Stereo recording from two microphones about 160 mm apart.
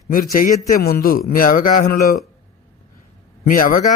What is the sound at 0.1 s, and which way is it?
A man's voice, 60° left (ahead or behind).